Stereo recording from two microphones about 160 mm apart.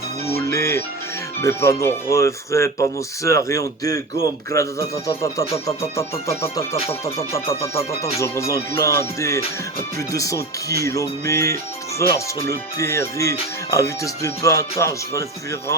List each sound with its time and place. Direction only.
0.3 s music: 15° left (ahead or behind)
1.4 s speech: 15° left (ahead or behind)
3.2 s music: 20° left (ahead or behind)
11.9 s speech: 20° left (ahead or behind)